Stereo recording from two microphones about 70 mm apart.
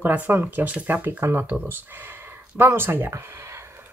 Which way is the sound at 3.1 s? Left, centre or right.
Right.